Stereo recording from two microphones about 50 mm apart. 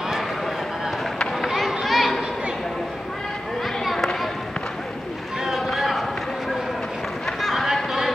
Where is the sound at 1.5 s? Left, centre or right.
Centre.